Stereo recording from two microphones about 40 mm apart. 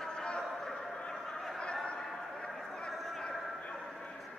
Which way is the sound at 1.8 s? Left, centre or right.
Left.